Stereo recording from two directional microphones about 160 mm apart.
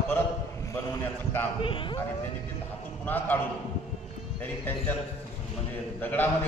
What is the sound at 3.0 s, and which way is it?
Speech, 10° left (ahead or behind).